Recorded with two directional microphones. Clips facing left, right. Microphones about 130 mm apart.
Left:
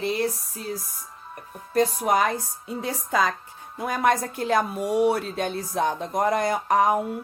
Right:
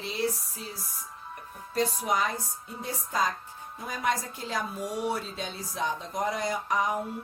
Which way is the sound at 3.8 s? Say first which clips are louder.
Left 8 dB; 65° left (ahead or behind).